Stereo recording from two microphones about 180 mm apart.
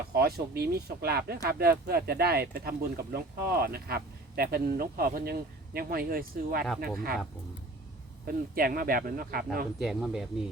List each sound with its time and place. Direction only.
0.1 s speech: 60° right (ahead or behind)
8.3 s speech: 55° right (ahead or behind)
9.7 s speech: centre (ahead or behind)